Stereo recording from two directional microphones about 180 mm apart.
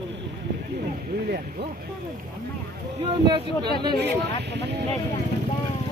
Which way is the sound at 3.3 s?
25° right (ahead or behind).